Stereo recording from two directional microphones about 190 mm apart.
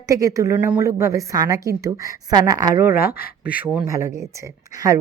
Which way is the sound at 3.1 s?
55° left (ahead or behind).